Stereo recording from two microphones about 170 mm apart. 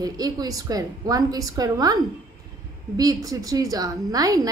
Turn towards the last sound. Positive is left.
turn(degrees=-20)  # may be behind; listen again after turning